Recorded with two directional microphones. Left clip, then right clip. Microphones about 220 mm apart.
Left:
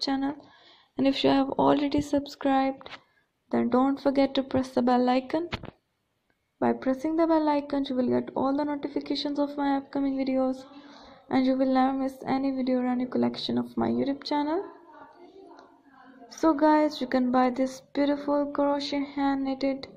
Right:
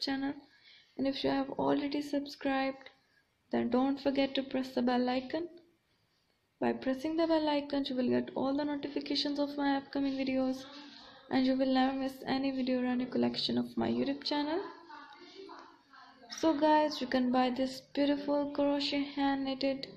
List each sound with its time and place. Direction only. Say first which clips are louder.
0.0 s speech: left 7 dB; 15° left (ahead or behind)
0.9 s speech: left 9 dB; 30° left (ahead or behind)
6.6 s speech: left 7 dB; 20° left (ahead or behind)
16.3 s speech: left 6 dB; 25° left (ahead or behind)